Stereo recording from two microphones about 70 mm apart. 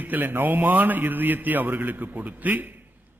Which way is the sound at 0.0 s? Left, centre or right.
Right.